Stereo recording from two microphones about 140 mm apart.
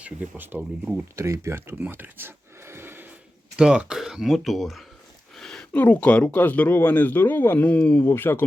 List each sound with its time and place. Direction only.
0.0 s speech: 15° right (ahead or behind)
3.6 s speech: 5° right (ahead or behind); by 8.4 s 15° left (ahead or behind)